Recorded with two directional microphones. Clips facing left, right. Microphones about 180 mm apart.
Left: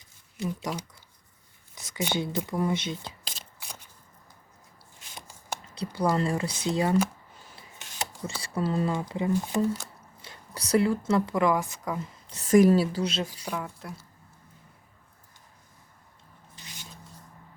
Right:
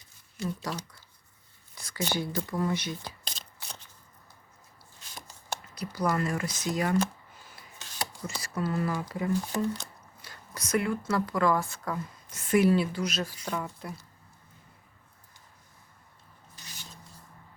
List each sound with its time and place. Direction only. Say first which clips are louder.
0.3 s speech: left 2 dB; 15° left (ahead or behind)
3.2 s shuffling cards: even; 10° left (ahead or behind)
5.1 s a sound: left 1 dB; 15° left (ahead or behind)
5.7 s speech: left 3 dB; 30° left (ahead or behind)
7.8 s a sound: left 1 dB; 25° left (ahead or behind)
8.4 s speech: left 3 dB; 30° left (ahead or behind)
9.6 s speech: left 4 dB; 5° left (ahead or behind)
10.2 s speech: left 2 dB; 25° left (ahead or behind)
12.3 s speech: left 4 dB; 40° left (ahead or behind)
13.4 s speech: even; 5° left (ahead or behind)